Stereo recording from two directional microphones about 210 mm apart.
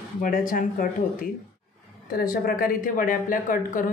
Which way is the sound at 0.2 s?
40° left (ahead or behind).